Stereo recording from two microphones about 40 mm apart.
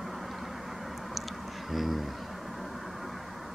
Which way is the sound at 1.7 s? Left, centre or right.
Centre.